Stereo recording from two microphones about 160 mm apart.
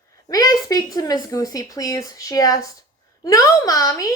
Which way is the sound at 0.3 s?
20° left (ahead or behind).